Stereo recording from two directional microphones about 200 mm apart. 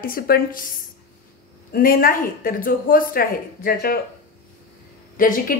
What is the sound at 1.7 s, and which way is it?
A woman's voice, 45° left (ahead or behind).